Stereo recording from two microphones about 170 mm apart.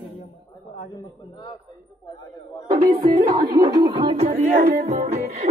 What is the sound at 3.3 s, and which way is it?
Music, 25° right (ahead or behind).